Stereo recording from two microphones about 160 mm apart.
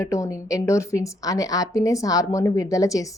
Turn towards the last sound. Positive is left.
turn(degrees=20)  # may be behind; listen again after turning